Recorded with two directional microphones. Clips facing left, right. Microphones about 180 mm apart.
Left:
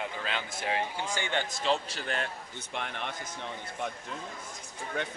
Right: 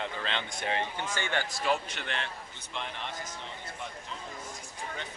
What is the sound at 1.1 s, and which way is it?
A man's voice, 15° left (ahead or behind).